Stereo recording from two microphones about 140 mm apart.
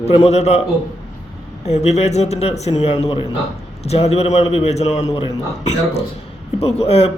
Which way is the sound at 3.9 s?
50° left (ahead or behind).